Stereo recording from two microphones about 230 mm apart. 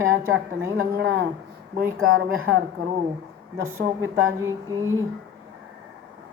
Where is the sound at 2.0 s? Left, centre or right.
Right.